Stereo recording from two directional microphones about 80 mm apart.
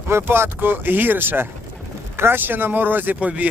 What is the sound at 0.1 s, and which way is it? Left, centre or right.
Speech, right.